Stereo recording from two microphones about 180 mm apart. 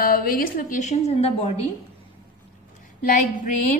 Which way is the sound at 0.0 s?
55° left (ahead or behind).